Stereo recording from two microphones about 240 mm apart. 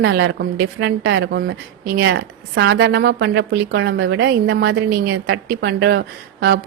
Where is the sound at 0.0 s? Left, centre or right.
Right.